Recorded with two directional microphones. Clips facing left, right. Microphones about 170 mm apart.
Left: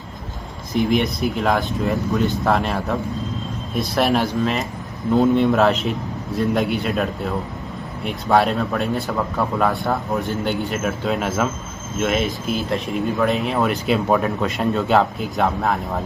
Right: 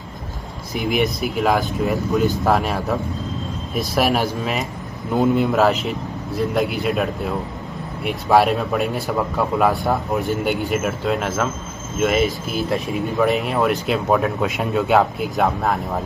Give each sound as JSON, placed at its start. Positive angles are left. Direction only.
{"t": 0.7, "sound": "a man's voice", "side_deg": -5}